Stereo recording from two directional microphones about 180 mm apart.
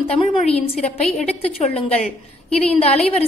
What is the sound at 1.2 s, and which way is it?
Speech, 35° left (ahead or behind).